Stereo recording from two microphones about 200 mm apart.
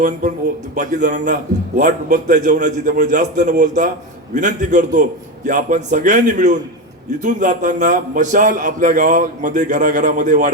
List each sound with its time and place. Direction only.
0.0 s a man's voice: 40° right (ahead or behind)